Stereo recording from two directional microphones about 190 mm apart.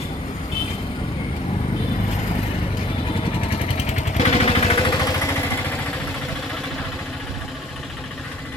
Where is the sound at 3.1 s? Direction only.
30° left (ahead or behind).